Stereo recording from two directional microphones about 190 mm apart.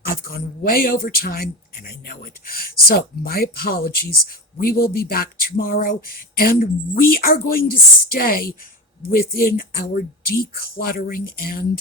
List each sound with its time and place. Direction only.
0.0 s speech: 50° left (ahead or behind)